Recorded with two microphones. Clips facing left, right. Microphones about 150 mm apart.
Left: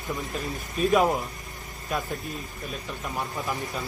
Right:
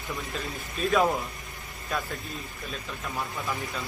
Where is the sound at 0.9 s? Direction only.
10° left (ahead or behind).